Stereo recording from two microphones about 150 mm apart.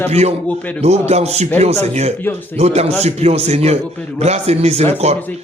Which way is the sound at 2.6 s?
45° right (ahead or behind).